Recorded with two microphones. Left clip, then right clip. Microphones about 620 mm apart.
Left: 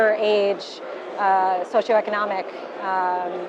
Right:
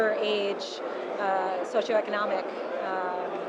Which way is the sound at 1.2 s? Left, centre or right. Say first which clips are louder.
Left 9 dB; left.